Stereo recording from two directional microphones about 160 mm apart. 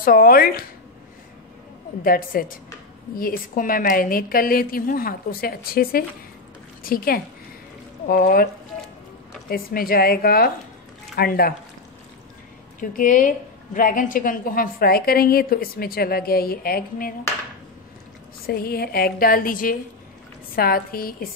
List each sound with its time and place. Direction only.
0.0 s a woman's voice: 65° left (ahead or behind)
2.0 s a woman's voice: 65° left (ahead or behind)
9.5 s a woman's voice: 65° left (ahead or behind)
12.9 s a woman's voice: 55° left (ahead or behind)
18.5 s a woman's voice: 70° left (ahead or behind)